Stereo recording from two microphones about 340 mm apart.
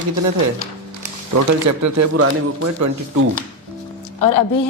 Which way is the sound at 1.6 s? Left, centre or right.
Right.